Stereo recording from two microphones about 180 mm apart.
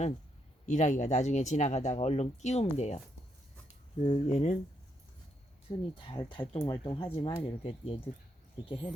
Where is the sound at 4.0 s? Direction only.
35° left (ahead or behind).